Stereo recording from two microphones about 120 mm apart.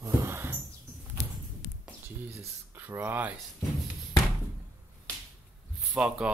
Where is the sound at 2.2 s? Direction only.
20° right (ahead or behind).